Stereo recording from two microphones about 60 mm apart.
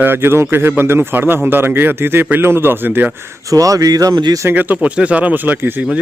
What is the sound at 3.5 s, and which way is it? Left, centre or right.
Speech, right.